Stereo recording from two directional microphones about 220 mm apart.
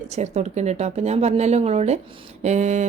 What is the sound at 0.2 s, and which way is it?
Speech, 30° right (ahead or behind).